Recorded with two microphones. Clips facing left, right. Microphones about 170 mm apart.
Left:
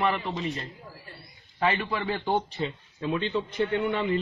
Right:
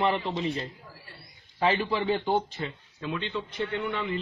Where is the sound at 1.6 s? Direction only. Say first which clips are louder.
Right 1 dB; 30° right (ahead or behind).